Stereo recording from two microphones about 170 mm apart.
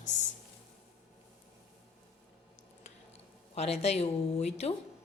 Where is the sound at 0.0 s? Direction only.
45° left (ahead or behind).